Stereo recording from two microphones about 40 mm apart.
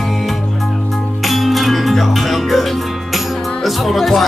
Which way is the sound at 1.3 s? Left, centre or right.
Centre.